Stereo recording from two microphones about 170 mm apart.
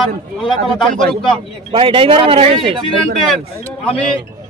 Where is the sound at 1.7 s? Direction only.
30° right (ahead or behind).